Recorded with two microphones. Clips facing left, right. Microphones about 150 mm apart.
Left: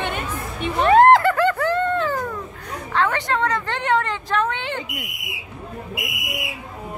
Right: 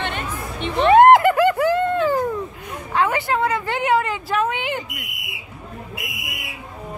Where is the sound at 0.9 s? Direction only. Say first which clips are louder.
Right 2 dB; 15° right (ahead or behind).